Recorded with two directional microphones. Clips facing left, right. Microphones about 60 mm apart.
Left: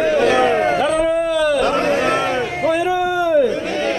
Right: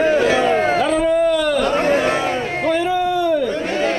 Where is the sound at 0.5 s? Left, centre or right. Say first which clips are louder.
Even; centre.